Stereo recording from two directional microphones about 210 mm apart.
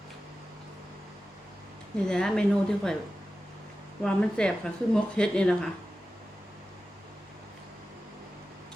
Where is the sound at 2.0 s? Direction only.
5° left (ahead or behind).